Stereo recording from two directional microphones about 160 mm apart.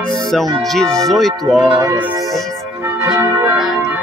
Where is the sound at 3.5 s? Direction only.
Centre (ahead or behind).